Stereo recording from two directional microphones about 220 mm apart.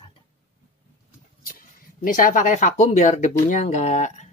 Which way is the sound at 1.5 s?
40° left (ahead or behind).